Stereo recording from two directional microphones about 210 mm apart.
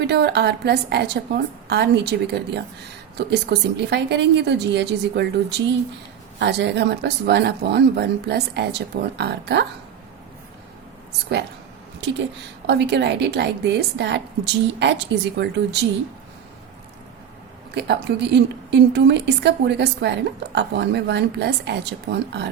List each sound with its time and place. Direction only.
0.0 s speech: 50° right (ahead or behind)
12.6 s speech: 55° right (ahead or behind)
17.7 s speech: 55° right (ahead or behind)